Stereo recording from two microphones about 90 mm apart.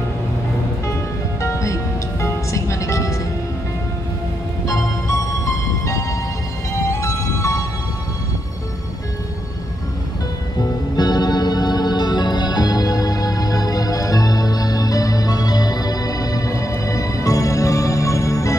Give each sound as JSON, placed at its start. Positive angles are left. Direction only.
{"t": 1.4, "sound": "music", "side_deg": 35}
{"t": 5.0, "sound": "music", "side_deg": 35}
{"t": 10.6, "sound": "music", "side_deg": 50}